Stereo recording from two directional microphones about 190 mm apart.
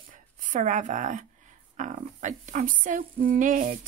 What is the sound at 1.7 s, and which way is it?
Female singing, 40° right (ahead or behind).